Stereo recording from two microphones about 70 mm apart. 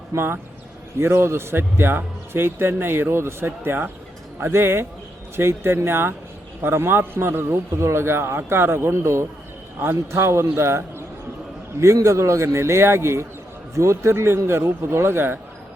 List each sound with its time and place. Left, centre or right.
0.1 s speech: right
0.9 s a man's voice: right
12.0 s a man's voice: right